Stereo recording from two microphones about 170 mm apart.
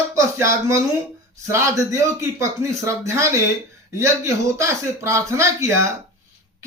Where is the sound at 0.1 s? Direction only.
15° right (ahead or behind).